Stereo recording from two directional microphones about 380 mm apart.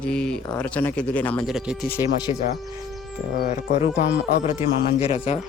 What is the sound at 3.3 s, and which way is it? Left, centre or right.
Speech, left.